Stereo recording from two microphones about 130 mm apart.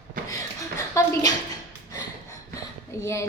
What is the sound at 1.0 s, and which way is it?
Speech, 25° left (ahead or behind).